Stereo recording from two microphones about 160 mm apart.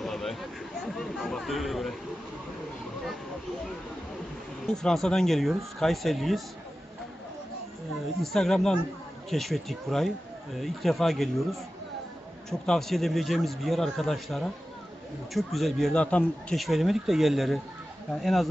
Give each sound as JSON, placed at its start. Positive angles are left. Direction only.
{"t": 0.0, "sound": "a sound", "side_deg": 0}
{"t": 4.6, "sound": "speech", "side_deg": 5}
{"t": 8.2, "sound": "speech", "side_deg": 0}
{"t": 12.4, "sound": "speech", "side_deg": 5}